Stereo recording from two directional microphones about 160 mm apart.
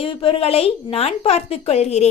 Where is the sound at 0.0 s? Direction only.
35° left (ahead or behind).